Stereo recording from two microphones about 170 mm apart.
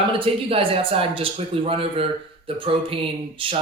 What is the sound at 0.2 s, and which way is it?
A man's voice, 35° right (ahead or behind).